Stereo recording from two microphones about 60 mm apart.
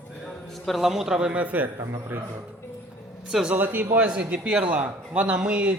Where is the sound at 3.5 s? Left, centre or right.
Right.